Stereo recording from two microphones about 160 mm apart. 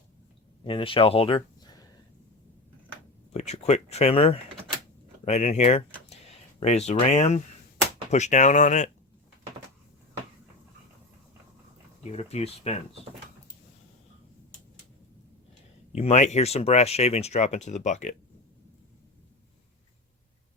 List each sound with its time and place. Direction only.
0.6 s speech: 35° left (ahead or behind)
3.3 s speech: 45° left (ahead or behind)
12.0 s speech: 40° left (ahead or behind)
15.9 s speech: 40° left (ahead or behind)